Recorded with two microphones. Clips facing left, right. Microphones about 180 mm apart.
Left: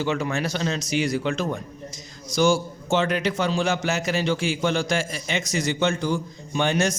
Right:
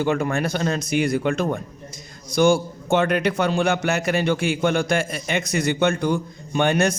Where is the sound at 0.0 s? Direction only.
55° right (ahead or behind).